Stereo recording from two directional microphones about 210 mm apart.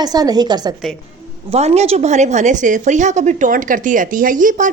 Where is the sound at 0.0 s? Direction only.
20° right (ahead or behind).